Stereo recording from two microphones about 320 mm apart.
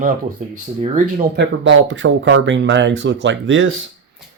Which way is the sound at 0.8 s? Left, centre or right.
Right.